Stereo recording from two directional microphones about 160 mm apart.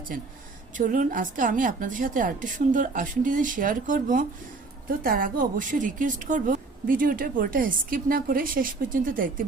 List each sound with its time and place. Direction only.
0.8 s a woman's voice: 55° right (ahead or behind)